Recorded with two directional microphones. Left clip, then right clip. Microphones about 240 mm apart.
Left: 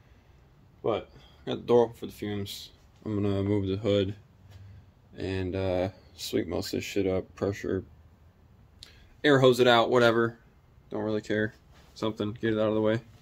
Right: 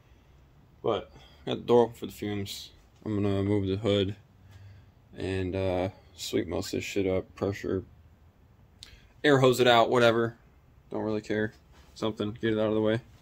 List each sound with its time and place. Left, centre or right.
0.8 s speech: centre